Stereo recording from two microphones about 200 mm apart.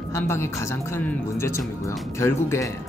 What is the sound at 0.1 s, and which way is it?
Speech, 15° left (ahead or behind).